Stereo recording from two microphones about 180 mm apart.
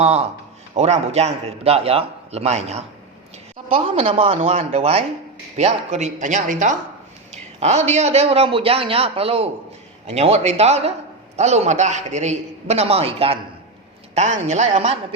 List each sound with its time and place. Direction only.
0.0 s a man's voice: 35° right (ahead or behind)